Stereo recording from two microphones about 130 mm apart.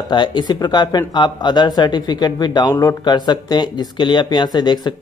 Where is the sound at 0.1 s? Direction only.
35° left (ahead or behind).